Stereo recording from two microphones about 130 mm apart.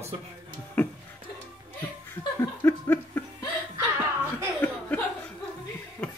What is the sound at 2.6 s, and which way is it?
Laughter, 20° left (ahead or behind).